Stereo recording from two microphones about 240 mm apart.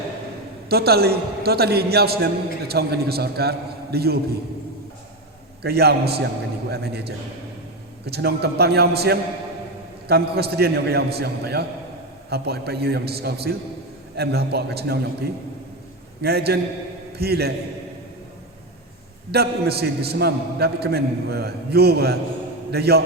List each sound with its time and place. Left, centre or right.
0.7 s a man's voice: right
5.6 s a man's voice: right
8.0 s a man's voice: right
19.3 s a man's voice: right